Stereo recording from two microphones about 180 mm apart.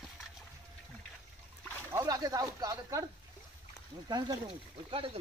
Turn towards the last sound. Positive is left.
turn(degrees=-30)  # may be behind; listen again after turning